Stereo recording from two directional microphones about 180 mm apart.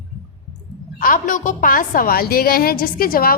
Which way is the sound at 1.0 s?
50° left (ahead or behind).